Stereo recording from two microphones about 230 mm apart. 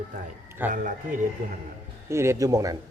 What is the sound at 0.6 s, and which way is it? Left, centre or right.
Speech, centre.